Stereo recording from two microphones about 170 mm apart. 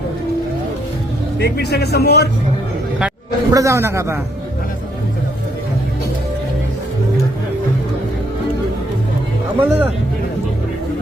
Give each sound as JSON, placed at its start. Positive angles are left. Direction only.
{"t": 1.4, "sound": "speech", "side_deg": 75}
{"t": 3.5, "sound": "a man's voice", "side_deg": -20}
{"t": 9.6, "sound": "a man's voice", "side_deg": -10}